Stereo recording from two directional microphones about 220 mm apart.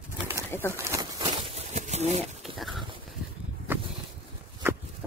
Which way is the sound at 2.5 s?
Centre (ahead or behind).